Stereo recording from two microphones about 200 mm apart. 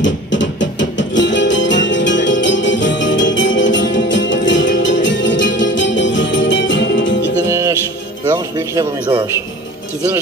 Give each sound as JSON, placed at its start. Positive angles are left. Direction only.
{"t": 0.0, "sound": "music", "side_deg": 65}
{"t": 7.4, "sound": "music", "side_deg": -15}
{"t": 8.3, "sound": "speech", "side_deg": -15}